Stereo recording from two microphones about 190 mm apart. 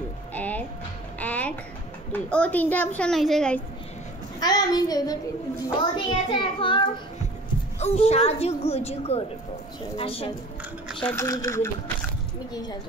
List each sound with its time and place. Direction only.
0.3 s speech: 10° left (ahead or behind)
1.2 s music: 10° left (ahead or behind)
2.1 s a woman's voice: 5° left (ahead or behind)
4.4 s a child's voice: 20° left (ahead or behind)
11.1 s a woman's voice: 15° left (ahead or behind)